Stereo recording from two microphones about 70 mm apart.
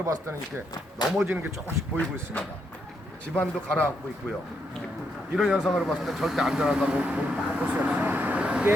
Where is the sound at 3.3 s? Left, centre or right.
Left.